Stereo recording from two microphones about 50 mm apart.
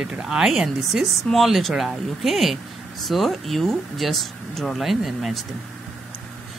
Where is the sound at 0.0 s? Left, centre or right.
Centre.